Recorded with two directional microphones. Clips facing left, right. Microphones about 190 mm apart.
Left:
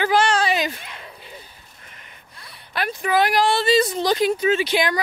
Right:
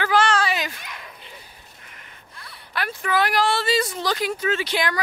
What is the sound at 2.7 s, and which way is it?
A woman's voice, 20° left (ahead or behind).